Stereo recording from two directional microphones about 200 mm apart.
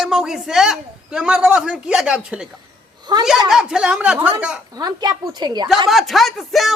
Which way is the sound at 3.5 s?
5° right (ahead or behind).